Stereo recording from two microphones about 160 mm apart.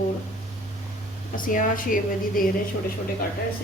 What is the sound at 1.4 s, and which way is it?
A woman's voice, 60° left (ahead or behind).